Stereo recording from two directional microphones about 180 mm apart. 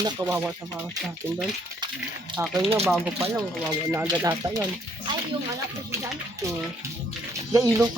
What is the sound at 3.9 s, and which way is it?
Speech, 15° right (ahead or behind).